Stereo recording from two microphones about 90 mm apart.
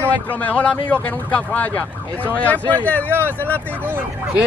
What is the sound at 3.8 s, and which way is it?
Speech, 20° right (ahead or behind).